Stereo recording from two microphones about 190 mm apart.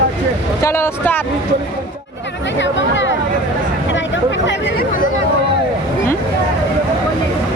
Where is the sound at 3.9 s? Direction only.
75° left (ahead or behind); by 5.1 s 50° left (ahead or behind).